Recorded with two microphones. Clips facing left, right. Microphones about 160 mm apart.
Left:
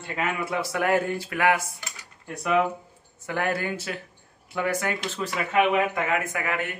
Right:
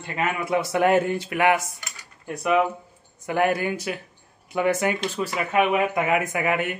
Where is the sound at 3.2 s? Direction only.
15° right (ahead or behind).